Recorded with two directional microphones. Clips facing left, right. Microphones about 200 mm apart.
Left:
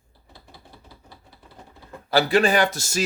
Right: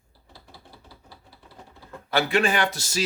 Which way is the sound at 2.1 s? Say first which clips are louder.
Left 4 dB; 35° left (ahead or behind).